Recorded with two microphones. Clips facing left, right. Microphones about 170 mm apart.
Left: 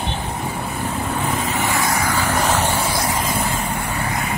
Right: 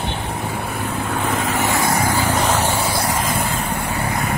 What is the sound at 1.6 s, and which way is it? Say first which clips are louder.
Vehicle: right 2 dB; 50° right (ahead or behind).